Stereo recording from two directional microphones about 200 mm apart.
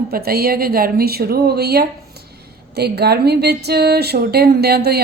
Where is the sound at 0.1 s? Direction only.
50° right (ahead or behind).